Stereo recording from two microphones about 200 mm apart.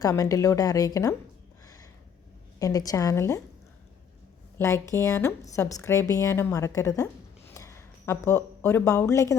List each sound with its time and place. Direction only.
0.0 s a woman's voice: 15° left (ahead or behind)
1.6 s a sound: 15° left (ahead or behind)
2.6 s a woman's voice: 15° left (ahead or behind)
4.5 s a woman's voice: 15° left (ahead or behind)